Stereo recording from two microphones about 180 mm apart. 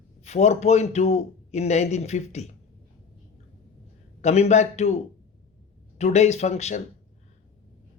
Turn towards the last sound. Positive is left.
turn(degrees=40)  # may be behind; listen again after turning